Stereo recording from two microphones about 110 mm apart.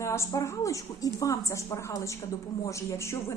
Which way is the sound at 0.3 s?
30° left (ahead or behind).